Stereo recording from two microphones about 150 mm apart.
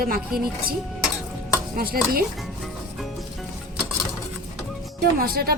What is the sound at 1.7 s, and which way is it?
Stir, 85° right.